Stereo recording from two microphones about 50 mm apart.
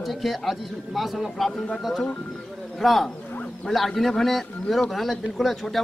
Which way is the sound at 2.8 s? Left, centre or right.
Centre.